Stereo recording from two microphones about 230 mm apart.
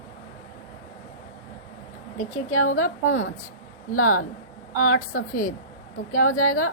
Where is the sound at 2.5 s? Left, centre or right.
Left.